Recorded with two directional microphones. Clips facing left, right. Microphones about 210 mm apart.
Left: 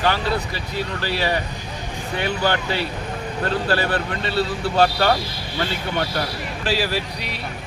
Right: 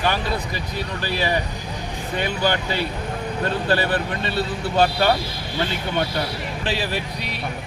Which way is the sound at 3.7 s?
20° right (ahead or behind).